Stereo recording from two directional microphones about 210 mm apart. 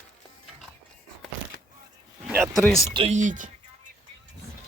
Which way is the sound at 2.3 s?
10° right (ahead or behind).